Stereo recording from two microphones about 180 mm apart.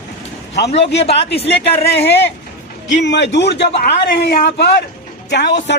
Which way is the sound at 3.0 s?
75° left (ahead or behind).